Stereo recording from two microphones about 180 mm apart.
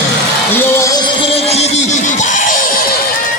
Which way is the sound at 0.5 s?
15° left (ahead or behind).